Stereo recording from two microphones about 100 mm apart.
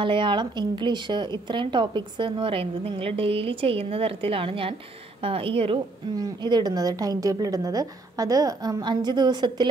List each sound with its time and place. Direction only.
0.0 s a woman's voice: 55° right (ahead or behind)
6.1 s a woman's voice: 40° right (ahead or behind)